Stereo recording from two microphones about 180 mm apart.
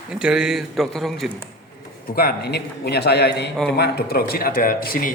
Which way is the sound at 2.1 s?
60° left (ahead or behind).